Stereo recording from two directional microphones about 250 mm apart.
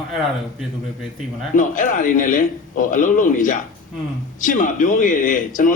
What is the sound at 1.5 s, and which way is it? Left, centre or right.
A man's voice, left.